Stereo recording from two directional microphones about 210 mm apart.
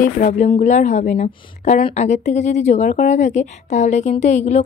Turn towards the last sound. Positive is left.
turn(degrees=35)  # may be behind; listen again after turning